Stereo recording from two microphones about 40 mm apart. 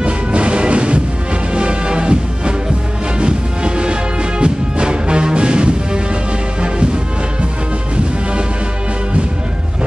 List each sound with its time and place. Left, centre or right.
0.0 s music: right